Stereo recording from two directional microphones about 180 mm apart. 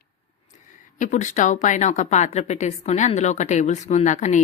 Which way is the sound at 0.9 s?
45° left (ahead or behind).